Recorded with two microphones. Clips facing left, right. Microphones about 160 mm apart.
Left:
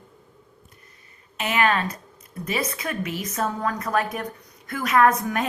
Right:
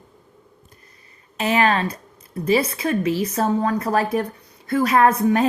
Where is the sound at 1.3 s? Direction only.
35° right (ahead or behind).